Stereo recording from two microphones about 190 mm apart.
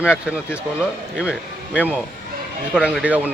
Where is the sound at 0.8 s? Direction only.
5° right (ahead or behind).